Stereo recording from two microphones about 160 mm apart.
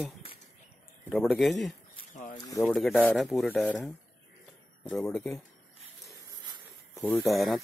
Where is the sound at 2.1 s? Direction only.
50° left (ahead or behind).